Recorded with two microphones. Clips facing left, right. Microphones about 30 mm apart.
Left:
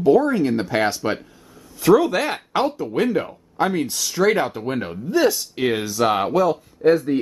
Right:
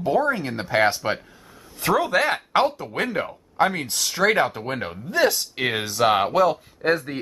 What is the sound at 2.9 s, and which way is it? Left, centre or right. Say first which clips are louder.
Speech: left 4 dB; centre.